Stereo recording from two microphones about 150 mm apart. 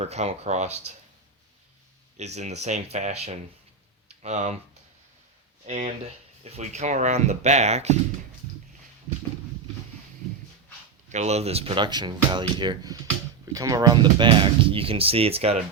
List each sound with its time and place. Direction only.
0.0 s speech: 45° right (ahead or behind)
2.1 s speech: 50° right (ahead or behind)
5.6 s speech: 40° right (ahead or behind)
11.1 s speech: 50° right (ahead or behind)